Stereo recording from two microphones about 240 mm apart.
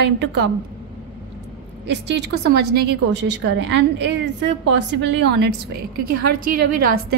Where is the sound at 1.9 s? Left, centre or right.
Right.